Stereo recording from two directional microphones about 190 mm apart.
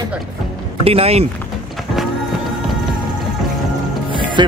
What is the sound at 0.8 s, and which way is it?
Speech, 30° right (ahead or behind).